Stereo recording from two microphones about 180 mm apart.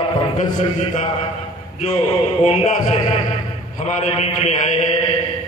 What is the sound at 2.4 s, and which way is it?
Speech, 35° left (ahead or behind).